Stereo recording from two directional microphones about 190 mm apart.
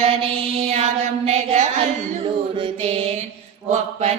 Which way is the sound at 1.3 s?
35° right (ahead or behind).